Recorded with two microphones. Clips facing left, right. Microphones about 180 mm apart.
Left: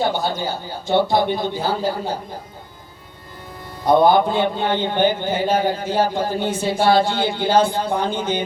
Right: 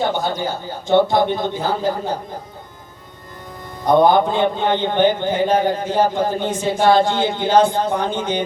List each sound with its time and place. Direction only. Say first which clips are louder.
0.0 s a man's voice: right 1 dB; 20° right (ahead or behind)
3.9 s a man's voice: right 1 dB; 20° right (ahead or behind)